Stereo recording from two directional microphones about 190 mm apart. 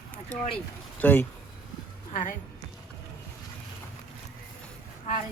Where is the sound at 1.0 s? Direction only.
10° left (ahead or behind).